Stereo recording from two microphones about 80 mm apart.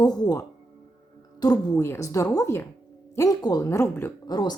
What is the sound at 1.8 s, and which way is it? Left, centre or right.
Speech, left.